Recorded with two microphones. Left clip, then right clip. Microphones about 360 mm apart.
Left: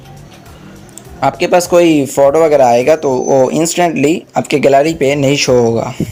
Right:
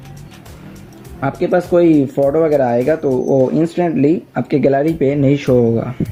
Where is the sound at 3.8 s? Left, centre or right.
Left.